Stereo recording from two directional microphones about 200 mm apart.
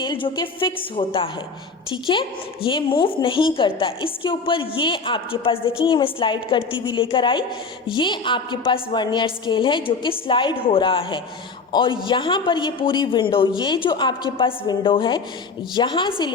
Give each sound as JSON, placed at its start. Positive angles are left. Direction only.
{"t": 0.0, "sound": "a woman's voice", "side_deg": 25}